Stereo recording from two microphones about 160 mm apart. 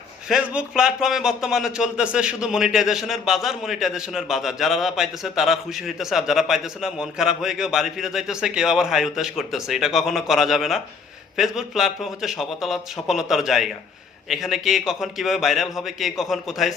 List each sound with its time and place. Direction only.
0.3 s speech: 5° right (ahead or behind)